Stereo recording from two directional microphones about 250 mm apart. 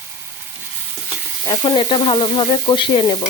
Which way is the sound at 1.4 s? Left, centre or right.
Centre.